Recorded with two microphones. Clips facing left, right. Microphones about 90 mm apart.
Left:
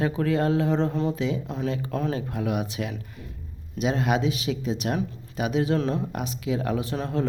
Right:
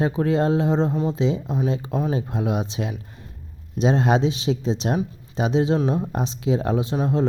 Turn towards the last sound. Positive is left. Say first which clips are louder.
# right 5 dB
turn(degrees=-20)  # may be behind; listen again after turning